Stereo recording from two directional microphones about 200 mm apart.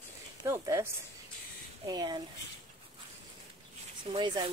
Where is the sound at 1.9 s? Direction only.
20° right (ahead or behind).